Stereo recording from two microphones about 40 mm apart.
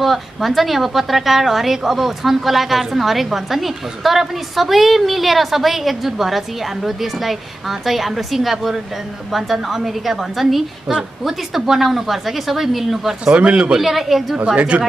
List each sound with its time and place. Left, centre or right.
0.0 s a woman's voice: centre
13.2 s a man's voice: right
13.7 s a woman's voice: centre
14.3 s a man's voice: right